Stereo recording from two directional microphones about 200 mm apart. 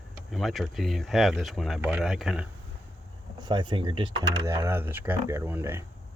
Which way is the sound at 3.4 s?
25° right (ahead or behind).